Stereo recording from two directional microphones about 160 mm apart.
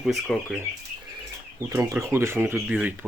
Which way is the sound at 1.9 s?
15° right (ahead or behind).